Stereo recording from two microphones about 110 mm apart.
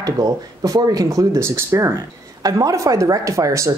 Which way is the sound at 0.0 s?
35° right (ahead or behind).